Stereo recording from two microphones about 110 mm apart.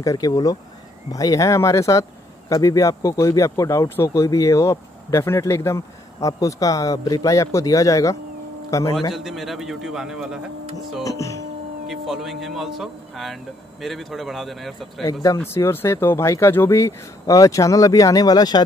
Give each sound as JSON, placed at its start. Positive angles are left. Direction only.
{"t": 0.0, "sound": "speech", "side_deg": 30}
{"t": 9.1, "sound": "speech", "side_deg": 0}
{"t": 11.1, "sound": "speech", "side_deg": 30}
{"t": 11.9, "sound": "speech", "side_deg": 0}
{"t": 15.3, "sound": "speech", "side_deg": 20}